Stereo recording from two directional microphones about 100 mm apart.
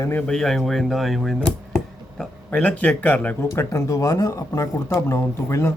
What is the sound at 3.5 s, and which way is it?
Speech, 30° left (ahead or behind).